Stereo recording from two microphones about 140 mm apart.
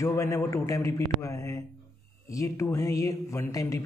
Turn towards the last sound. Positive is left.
turn(degrees=25)  # may be behind; listen again after turning